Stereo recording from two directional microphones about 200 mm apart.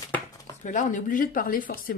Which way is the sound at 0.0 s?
20° left (ahead or behind).